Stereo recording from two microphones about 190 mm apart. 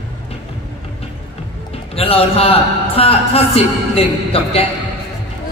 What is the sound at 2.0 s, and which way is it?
A man's voice, 30° left (ahead or behind).